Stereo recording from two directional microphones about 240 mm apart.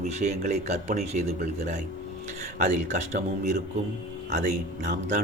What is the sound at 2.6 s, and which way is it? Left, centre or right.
A man's voice, right.